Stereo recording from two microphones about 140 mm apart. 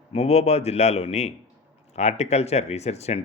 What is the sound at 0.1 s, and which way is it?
A man's voice, 45° left (ahead or behind).